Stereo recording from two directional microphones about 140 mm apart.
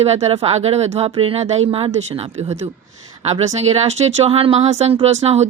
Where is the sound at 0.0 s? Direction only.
50° right (ahead or behind).